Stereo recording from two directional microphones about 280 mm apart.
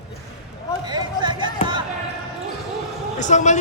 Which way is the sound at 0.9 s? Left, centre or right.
Centre.